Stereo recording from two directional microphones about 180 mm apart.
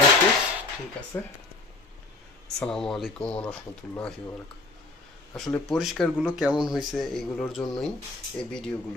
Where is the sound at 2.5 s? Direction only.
5° left (ahead or behind).